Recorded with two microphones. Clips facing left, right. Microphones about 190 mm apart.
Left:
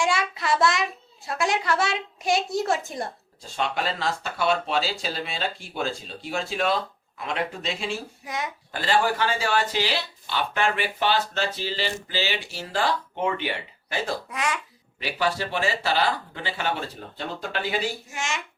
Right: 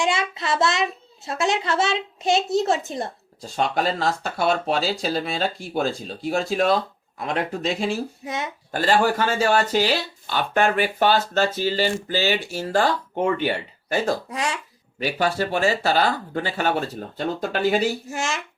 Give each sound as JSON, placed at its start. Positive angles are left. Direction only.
{"t": 0.0, "sound": "a child's voice", "side_deg": -20}
{"t": 3.5, "sound": "speech", "side_deg": -45}
{"t": 8.2, "sound": "a child's voice", "side_deg": -25}
{"t": 8.7, "sound": "speech", "side_deg": -45}
{"t": 14.9, "sound": "speech", "side_deg": -45}